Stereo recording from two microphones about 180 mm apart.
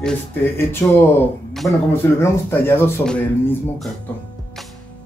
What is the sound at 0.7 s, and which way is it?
Speech, 10° left (ahead or behind).